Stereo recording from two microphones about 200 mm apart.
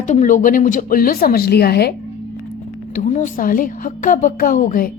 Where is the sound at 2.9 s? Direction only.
40° left (ahead or behind).